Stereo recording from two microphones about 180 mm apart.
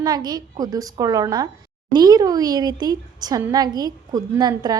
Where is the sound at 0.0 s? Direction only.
20° right (ahead or behind).